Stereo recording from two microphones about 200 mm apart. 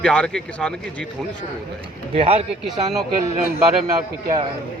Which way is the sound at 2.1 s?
30° right (ahead or behind).